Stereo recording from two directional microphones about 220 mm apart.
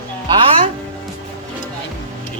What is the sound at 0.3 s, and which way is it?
Music, 25° right (ahead or behind).